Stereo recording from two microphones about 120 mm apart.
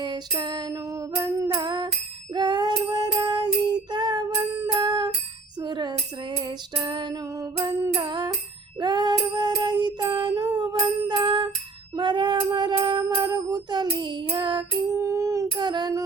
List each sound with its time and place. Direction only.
0.0 s music: 35° right (ahead or behind)
1.6 s music: 40° right (ahead or behind)
5.5 s wind chime: 40° right (ahead or behind)
6.4 s music: 40° right (ahead or behind)
10.6 s bicycle bell: 40° right (ahead or behind)
11.9 s a sound: 40° right (ahead or behind)
14.9 s a sound: 25° right (ahead or behind)
15.5 s child singing: 35° right (ahead or behind)